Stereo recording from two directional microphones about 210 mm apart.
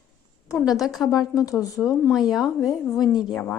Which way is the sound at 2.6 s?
15° left (ahead or behind).